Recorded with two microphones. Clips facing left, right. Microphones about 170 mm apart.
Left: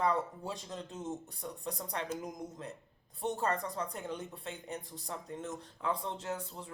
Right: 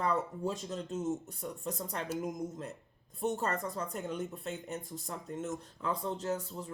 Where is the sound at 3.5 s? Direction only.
45° right (ahead or behind).